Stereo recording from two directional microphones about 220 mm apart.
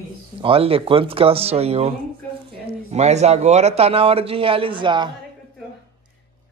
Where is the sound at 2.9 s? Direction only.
30° right (ahead or behind).